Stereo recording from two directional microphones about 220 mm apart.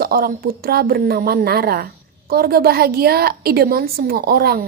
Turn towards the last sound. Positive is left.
turn(degrees=-45)  # may be behind; listen again after turning